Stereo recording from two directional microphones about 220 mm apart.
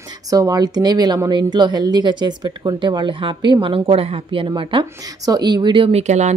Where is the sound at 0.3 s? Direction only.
15° right (ahead or behind).